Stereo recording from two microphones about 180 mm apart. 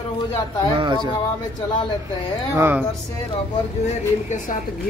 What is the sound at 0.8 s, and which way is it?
Speech, 25° right (ahead or behind).